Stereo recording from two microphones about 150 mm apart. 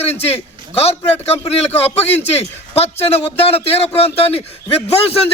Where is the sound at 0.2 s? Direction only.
40° left (ahead or behind).